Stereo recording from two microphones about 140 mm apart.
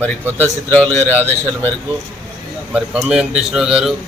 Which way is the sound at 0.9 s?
15° left (ahead or behind).